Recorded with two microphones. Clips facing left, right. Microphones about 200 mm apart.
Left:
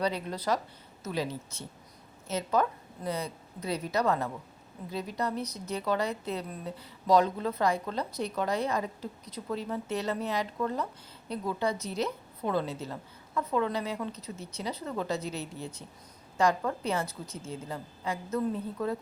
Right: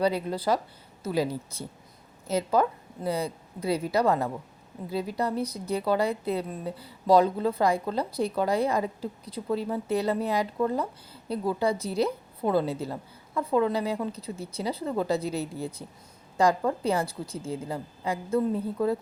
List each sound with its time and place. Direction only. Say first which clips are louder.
0.3 s a woman's voice: right 4 dB; 30° right (ahead or behind)
2.2 s a woman's voice: right 4 dB; 30° right (ahead or behind)